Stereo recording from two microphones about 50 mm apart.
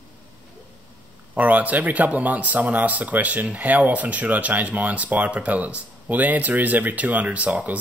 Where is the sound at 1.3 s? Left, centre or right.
Right.